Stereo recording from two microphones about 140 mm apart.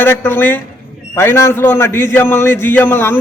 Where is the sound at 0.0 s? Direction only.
15° left (ahead or behind).